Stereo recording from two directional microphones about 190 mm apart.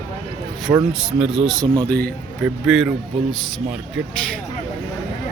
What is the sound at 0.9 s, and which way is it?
Speech, 5° right (ahead or behind).